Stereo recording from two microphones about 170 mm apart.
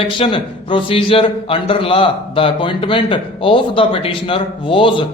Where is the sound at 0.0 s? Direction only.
30° left (ahead or behind).